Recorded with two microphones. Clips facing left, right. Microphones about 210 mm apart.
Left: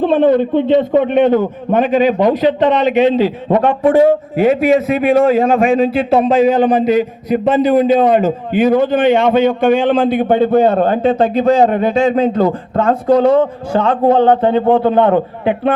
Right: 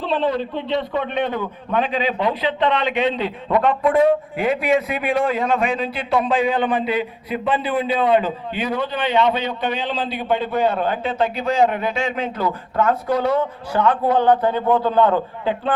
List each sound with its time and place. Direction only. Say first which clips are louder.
0.0 s a man's voice: left 10 dB; 50° left (ahead or behind)
13.7 s a man's voice: left 6 dB; 25° left (ahead or behind)